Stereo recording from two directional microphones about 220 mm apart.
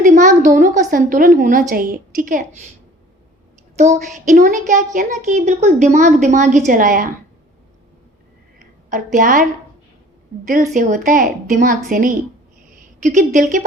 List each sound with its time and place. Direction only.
0.0 s a woman's voice: 35° right (ahead or behind)
3.9 s a woman's voice: 40° right (ahead or behind)
8.5 s a sound: 40° right (ahead or behind)
10.8 s a woman's voice: 35° right (ahead or behind)
13.1 s a woman's voice: 35° right (ahead or behind)